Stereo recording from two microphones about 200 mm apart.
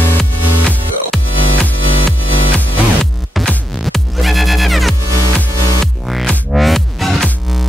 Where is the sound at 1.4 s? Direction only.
30° left (ahead or behind).